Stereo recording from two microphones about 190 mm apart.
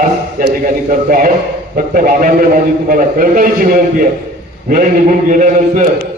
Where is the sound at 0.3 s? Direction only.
45° right (ahead or behind).